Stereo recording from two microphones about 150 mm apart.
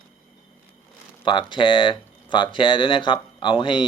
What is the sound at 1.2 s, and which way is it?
Speech, 30° left (ahead or behind).